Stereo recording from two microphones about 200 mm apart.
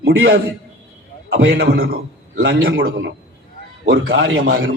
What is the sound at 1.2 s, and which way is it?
A man's voice, 75° right (ahead or behind).